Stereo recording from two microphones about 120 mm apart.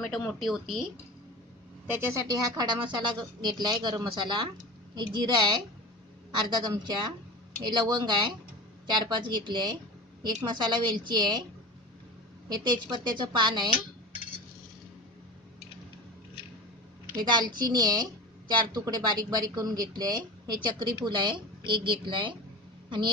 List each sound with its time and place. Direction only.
0.0 s speech: centre (ahead or behind)
1.9 s a woman's voice: 20° right (ahead or behind)
2.2 s speech: 35° right (ahead or behind)
6.3 s speech: 35° right (ahead or behind)
12.4 s speech: 35° right (ahead or behind)
17.2 s speech: 35° right (ahead or behind)